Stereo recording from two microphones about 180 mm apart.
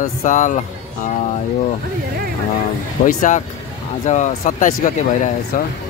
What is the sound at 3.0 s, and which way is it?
Speech, 45° left (ahead or behind).